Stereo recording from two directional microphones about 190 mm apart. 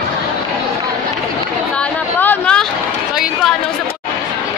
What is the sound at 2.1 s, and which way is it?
Speech, 5° left (ahead or behind).